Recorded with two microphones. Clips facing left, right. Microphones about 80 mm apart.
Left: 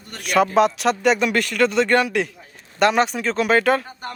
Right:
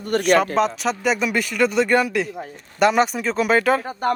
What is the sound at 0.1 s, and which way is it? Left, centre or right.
Speech, right.